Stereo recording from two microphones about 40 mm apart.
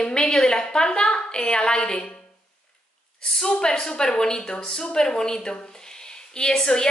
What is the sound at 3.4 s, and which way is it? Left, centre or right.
A woman's voice, left.